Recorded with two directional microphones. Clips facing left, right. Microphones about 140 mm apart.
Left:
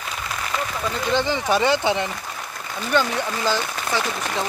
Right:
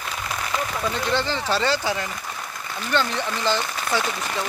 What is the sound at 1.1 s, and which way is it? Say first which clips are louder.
Speech: left 6 dB; 15° left (ahead or behind).